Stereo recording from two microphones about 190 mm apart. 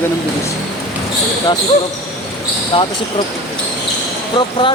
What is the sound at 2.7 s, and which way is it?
Speech, 25° left (ahead or behind).